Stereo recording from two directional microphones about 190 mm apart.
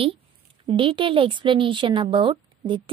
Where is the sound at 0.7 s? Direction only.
25° right (ahead or behind).